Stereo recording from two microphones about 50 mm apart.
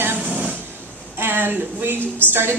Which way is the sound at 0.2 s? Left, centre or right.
Right.